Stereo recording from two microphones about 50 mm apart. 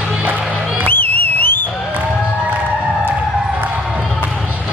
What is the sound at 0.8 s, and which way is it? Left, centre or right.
Music, left.